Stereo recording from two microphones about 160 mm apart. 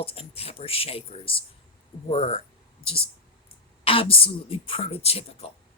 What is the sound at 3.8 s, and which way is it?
A woman's voice, 35° left (ahead or behind).